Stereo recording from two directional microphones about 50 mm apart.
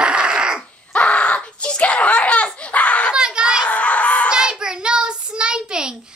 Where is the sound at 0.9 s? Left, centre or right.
Left.